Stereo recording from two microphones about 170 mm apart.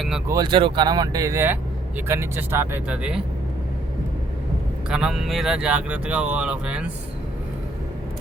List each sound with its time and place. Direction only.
0.3 s speech: 25° right (ahead or behind); by 3.2 s 5° right (ahead or behind)
4.9 s speech: 5° right (ahead or behind)